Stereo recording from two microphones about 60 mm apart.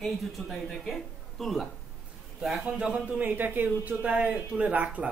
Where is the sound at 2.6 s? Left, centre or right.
Centre.